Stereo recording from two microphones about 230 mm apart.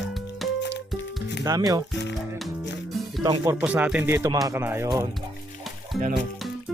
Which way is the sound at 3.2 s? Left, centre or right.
Centre.